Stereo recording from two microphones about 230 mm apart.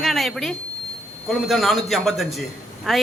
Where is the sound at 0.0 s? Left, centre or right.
Centre.